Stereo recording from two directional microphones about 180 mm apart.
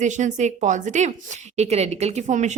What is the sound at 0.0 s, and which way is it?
Speech, 40° right (ahead or behind).